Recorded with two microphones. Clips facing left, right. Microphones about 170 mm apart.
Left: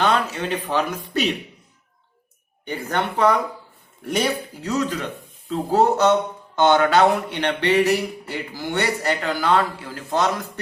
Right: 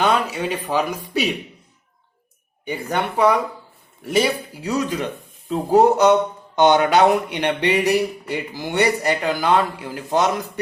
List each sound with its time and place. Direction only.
0.0 s speech: 15° right (ahead or behind)
2.6 s speech: 10° right (ahead or behind)